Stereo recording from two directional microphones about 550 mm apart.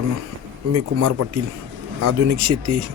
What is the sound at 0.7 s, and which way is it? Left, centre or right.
Speech, right.